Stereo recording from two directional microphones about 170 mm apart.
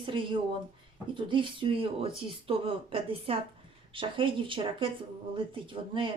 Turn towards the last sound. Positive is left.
turn(degrees=-30)  # may be behind; listen again after turning